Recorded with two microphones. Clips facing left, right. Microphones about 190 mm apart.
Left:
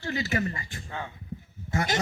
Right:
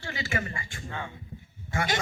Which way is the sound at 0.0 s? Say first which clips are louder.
Left 4 dB; 40° left (ahead or behind).